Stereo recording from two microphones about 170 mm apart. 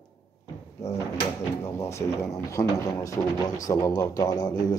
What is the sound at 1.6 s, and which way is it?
A man's voice, 15° left (ahead or behind).